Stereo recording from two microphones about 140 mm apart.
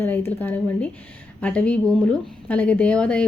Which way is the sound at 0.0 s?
15° left (ahead or behind).